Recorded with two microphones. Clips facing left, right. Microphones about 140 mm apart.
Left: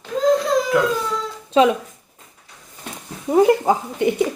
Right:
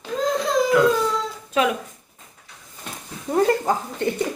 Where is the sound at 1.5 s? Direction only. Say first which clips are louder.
Left 6 dB; 30° left (ahead or behind).